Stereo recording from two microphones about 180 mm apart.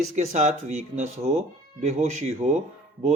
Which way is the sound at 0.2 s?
40° right (ahead or behind).